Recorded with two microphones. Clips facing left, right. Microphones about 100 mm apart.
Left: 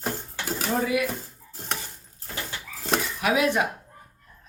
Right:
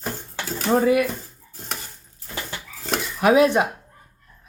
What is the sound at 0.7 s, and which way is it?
Cutlery, 45° right (ahead or behind).